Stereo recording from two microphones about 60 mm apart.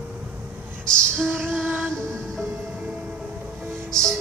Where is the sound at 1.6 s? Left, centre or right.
Right.